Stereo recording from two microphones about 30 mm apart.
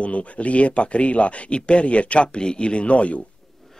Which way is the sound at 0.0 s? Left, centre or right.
Left.